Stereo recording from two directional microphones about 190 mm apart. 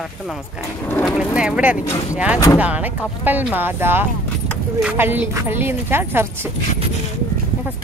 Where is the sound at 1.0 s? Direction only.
5° right (ahead or behind).